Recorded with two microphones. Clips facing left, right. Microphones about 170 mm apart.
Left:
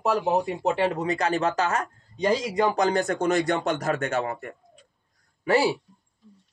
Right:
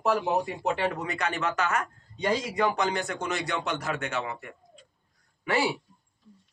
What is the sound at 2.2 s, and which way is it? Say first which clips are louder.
Speech: left 4 dB; 20° left (ahead or behind).